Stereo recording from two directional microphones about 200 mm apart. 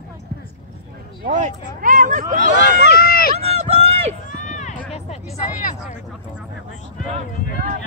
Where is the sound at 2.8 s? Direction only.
50° left (ahead or behind).